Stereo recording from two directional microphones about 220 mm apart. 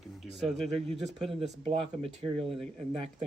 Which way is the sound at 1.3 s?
30° right (ahead or behind).